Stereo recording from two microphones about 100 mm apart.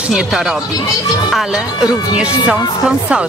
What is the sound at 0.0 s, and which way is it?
A woman's voice, 10° right (ahead or behind).